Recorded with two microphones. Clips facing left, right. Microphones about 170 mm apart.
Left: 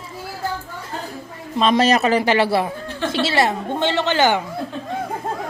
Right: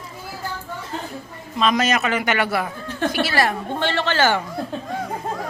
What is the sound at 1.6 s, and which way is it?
A man's voice, 30° left (ahead or behind).